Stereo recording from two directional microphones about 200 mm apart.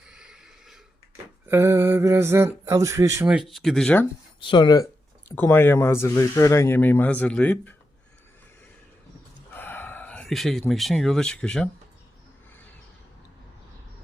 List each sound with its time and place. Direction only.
0.0 s a sound: 5° right (ahead or behind)
1.5 s speech: 15° right (ahead or behind); by 4.0 s 5° left (ahead or behind)
4.4 s speech: 25° left (ahead or behind)
5.3 s speech: 10° left (ahead or behind)
9.5 s speech: 10° left (ahead or behind)